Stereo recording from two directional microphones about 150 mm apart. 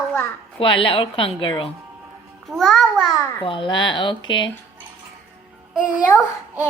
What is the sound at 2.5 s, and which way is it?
Speech, centre (ahead or behind).